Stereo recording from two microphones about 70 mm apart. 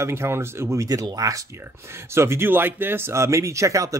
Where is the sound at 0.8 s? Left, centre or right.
Right.